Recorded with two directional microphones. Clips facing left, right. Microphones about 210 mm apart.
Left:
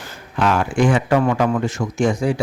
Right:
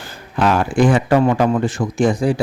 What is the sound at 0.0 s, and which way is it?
Speech, 35° right (ahead or behind).